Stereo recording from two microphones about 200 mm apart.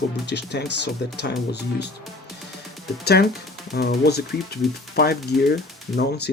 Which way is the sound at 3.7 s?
55° left (ahead or behind).